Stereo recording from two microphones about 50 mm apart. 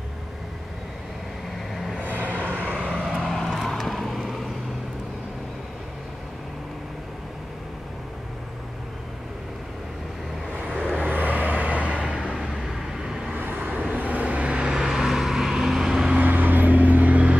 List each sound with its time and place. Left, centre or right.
1.7 s vehicle: centre
2.1 s vehicle: right
2.8 s vehicle: centre
3.1 s vehicle: centre
10.6 s vehicle: right
13.3 s vehicle: right; by 16.2 s centre
16.2 s vehicle: right